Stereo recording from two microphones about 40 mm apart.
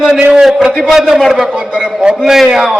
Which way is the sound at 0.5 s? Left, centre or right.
Right.